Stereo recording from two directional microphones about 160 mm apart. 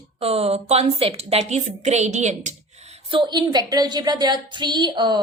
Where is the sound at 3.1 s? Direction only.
30° right (ahead or behind).